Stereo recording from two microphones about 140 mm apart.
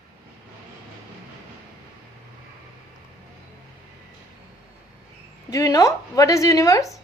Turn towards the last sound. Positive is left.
turn(degrees=25)  # may be behind; listen again after turning